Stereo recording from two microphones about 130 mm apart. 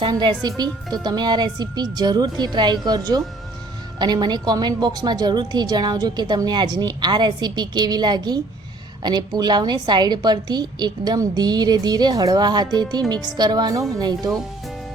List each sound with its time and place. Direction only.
0.0 s a woman's voice: 35° right (ahead or behind)